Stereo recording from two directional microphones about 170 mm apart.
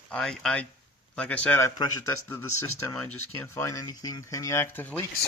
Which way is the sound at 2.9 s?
10° left (ahead or behind).